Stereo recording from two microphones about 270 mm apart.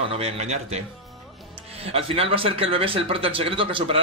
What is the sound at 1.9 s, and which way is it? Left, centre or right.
Speech, right.